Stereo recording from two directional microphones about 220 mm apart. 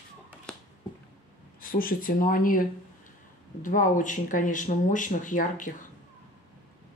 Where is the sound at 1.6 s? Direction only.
40° left (ahead or behind).